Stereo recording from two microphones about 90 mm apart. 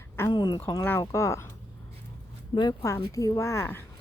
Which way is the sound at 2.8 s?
35° left (ahead or behind).